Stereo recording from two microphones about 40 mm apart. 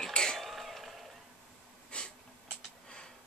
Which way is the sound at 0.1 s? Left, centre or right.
Centre.